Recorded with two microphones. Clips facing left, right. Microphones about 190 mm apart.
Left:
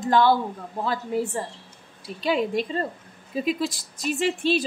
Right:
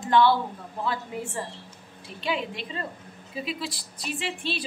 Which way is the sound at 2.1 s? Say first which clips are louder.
Left 7 dB; 40° left (ahead or behind).